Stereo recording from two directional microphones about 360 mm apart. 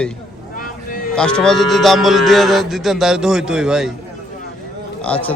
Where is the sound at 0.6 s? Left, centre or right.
Left.